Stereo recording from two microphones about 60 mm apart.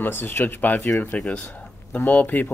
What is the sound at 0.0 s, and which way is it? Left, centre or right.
Speech, left.